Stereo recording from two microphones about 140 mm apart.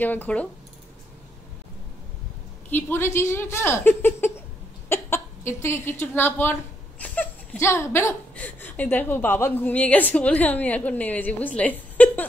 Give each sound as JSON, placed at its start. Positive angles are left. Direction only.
{"t": 0.0, "sound": "speech", "side_deg": 10}
{"t": 2.7, "sound": "speech", "side_deg": 15}